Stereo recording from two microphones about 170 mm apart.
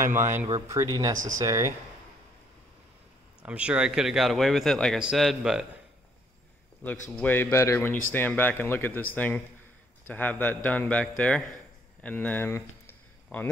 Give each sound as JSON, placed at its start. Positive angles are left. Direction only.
{"t": 0.5, "sound": "speech", "side_deg": -20}
{"t": 3.4, "sound": "speech", "side_deg": -5}
{"t": 6.8, "sound": "speech", "side_deg": 10}
{"t": 12.0, "sound": "a sound", "side_deg": 5}